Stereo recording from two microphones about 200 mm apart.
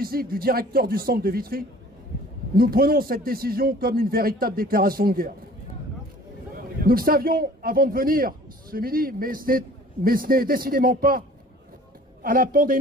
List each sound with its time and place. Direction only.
0.0 s a man's voice: 50° right (ahead or behind)
6.5 s a man's voice: 45° right (ahead or behind)